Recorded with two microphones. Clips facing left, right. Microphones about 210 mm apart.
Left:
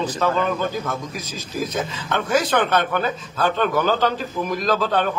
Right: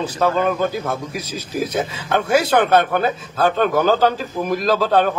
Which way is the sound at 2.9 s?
45° right (ahead or behind).